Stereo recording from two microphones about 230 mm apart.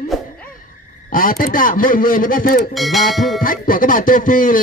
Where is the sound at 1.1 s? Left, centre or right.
Left.